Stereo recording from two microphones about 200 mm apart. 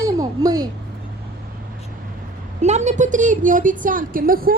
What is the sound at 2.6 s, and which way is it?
A woman's voice, 35° right (ahead or behind).